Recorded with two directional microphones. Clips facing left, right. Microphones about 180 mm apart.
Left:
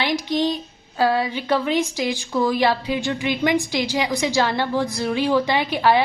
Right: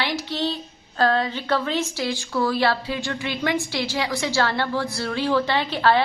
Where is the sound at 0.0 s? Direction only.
15° left (ahead or behind).